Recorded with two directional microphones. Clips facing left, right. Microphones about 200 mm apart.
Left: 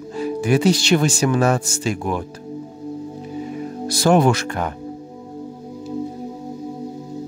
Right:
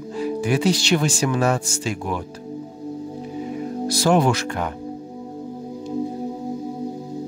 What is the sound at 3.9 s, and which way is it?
Speech, 50° left (ahead or behind).